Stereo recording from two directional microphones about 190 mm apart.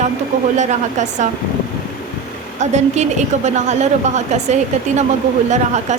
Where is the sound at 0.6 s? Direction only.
40° right (ahead or behind).